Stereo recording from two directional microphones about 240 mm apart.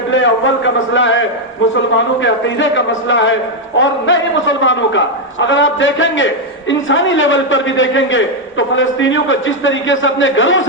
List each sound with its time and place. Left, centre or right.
0.2 s a man's voice: left
2.2 s a man's voice: left